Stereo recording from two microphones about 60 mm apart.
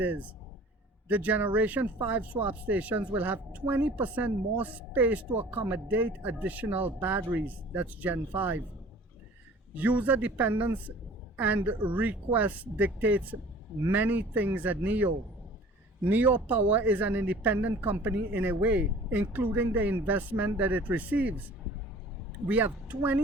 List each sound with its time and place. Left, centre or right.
0.0 s speech: right
9.7 s speech: right
22.4 s speech: right